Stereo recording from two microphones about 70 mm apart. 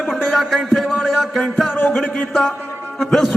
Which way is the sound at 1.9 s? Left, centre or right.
Centre.